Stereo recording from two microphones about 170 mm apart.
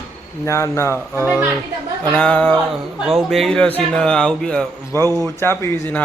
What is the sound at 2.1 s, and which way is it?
Speech, 5° left (ahead or behind).